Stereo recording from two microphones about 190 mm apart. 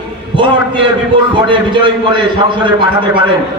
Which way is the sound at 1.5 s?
25° right (ahead or behind).